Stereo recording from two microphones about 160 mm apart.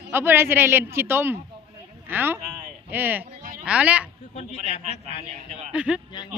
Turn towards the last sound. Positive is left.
turn(degrees=-5)  # may be behind; listen again after turning